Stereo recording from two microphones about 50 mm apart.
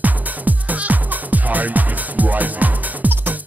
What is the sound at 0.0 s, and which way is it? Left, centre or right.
Music, right.